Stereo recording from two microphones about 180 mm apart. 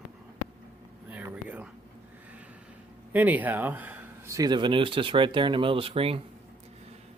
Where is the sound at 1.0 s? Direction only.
10° right (ahead or behind).